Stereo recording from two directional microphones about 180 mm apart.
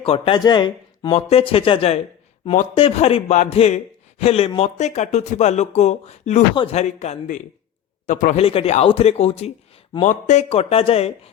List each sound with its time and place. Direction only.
0.0 s speech: 30° left (ahead or behind)